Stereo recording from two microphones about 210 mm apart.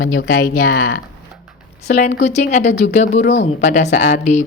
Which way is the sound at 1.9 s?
35° left (ahead or behind).